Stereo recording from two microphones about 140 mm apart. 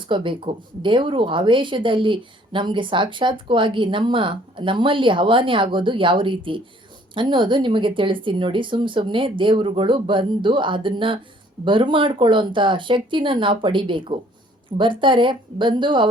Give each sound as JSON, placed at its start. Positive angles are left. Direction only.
{"t": 0.1, "sound": "speech", "side_deg": -35}